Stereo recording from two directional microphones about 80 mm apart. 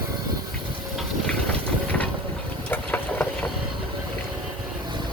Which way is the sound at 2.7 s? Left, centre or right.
Left.